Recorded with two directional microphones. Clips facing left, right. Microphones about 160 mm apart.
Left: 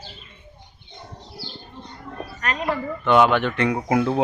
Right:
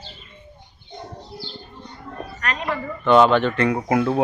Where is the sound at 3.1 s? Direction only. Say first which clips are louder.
Right 2 dB; 10° left (ahead or behind).